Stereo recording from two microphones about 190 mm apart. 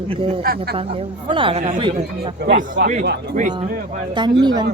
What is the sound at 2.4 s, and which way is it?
Speech, 55° right (ahead or behind).